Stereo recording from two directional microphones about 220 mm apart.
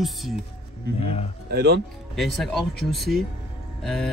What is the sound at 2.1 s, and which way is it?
Speech, centre (ahead or behind).